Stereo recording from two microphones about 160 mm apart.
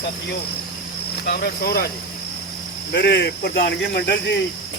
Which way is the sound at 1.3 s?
75° left (ahead or behind).